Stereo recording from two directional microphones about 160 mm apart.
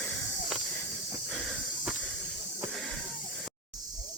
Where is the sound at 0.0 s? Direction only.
Centre (ahead or behind).